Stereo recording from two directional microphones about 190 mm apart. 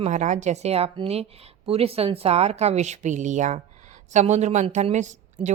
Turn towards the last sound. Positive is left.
turn(degrees=-40)  # may be behind; listen again after turning